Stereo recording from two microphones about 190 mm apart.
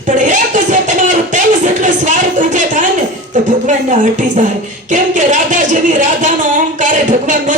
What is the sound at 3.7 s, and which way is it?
Speech, 40° right (ahead or behind).